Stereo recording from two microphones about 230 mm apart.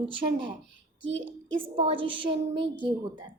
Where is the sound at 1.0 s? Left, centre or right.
Right.